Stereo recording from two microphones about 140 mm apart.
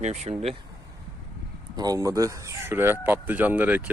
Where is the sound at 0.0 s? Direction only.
55° right (ahead or behind).